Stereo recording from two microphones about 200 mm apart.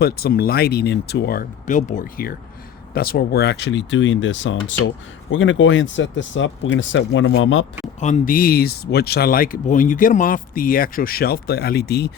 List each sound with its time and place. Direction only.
0.0 s speech: 50° left (ahead or behind); by 7.7 s 70° left (ahead or behind)
8.0 s speech: 40° left (ahead or behind)